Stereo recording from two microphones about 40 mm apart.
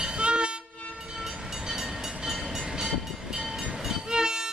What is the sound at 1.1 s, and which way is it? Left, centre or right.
Train, centre.